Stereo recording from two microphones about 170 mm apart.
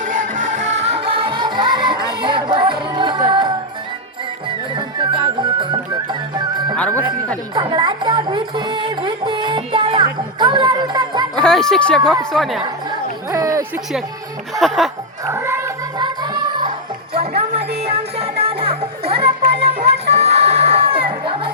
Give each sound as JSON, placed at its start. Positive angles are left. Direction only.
{"t": 0.0, "sound": "music", "side_deg": -50}
{"t": 4.7, "sound": "music", "side_deg": -30}
{"t": 6.7, "sound": "speech", "side_deg": 10}
{"t": 7.5, "sound": "music", "side_deg": -25}
{"t": 11.3, "sound": "speech", "side_deg": 5}
{"t": 13.3, "sound": "a sound", "side_deg": -20}
{"t": 14.6, "sound": "speech", "side_deg": 0}
{"t": 15.3, "sound": "music", "side_deg": -15}
{"t": 17.2, "sound": "music", "side_deg": -35}
{"t": 20.1, "sound": "crowd", "side_deg": -40}